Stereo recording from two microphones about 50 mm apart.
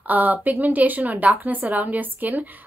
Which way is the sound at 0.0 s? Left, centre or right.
Right.